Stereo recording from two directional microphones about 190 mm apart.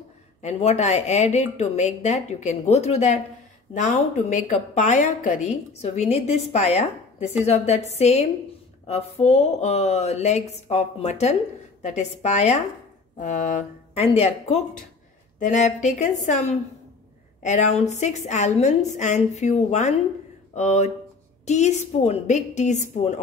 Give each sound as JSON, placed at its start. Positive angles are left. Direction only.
{"t": 0.4, "sound": "a woman's voice", "side_deg": 35}